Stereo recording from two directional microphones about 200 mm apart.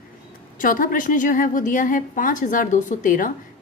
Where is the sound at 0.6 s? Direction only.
45° left (ahead or behind).